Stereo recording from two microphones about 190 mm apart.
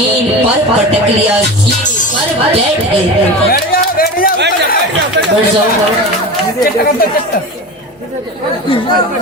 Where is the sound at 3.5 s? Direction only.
50° left (ahead or behind).